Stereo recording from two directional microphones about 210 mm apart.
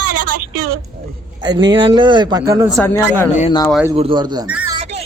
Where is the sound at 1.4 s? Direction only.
20° right (ahead or behind).